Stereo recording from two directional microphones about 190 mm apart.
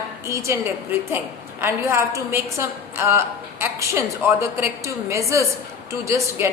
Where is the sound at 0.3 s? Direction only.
15° right (ahead or behind).